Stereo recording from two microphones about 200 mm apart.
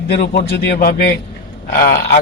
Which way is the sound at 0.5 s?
50° left (ahead or behind).